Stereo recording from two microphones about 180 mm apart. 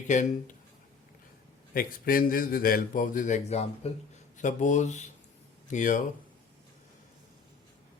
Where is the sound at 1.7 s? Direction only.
55° left (ahead or behind).